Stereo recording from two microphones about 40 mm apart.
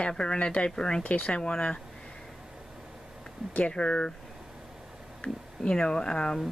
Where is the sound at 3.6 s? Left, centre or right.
Left.